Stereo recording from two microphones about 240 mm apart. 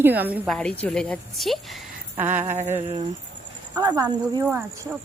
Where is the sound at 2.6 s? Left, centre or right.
Right.